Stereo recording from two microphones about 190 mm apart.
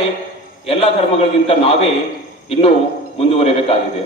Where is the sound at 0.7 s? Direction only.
30° left (ahead or behind).